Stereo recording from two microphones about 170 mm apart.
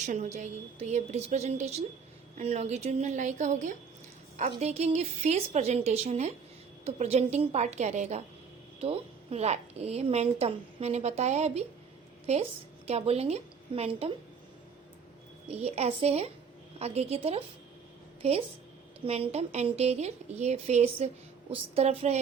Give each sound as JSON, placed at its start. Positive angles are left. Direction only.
{"t": 0.0, "sound": "a woman's voice", "side_deg": -45}
{"t": 15.4, "sound": "a woman's voice", "side_deg": -40}